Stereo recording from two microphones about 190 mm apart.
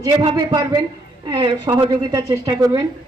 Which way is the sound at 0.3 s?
20° right (ahead or behind).